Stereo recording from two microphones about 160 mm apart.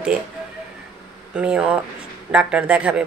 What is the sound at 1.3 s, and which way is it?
Speech, 5° right (ahead or behind).